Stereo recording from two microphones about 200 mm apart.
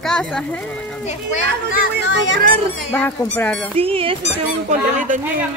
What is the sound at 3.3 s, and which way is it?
Speech, 10° left (ahead or behind).